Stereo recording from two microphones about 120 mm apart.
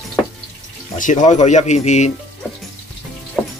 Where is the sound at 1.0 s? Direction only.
90° left; by 2.1 s 70° left (ahead or behind).